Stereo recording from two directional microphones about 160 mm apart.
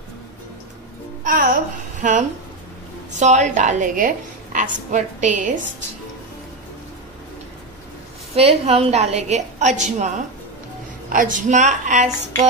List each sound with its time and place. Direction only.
1.2 s a woman's voice: 55° right (ahead or behind)
8.4 s a woman's voice: 40° right (ahead or behind)